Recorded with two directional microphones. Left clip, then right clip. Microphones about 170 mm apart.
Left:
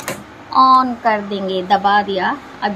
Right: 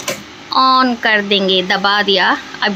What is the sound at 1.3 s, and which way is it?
A woman's voice, 10° right (ahead or behind).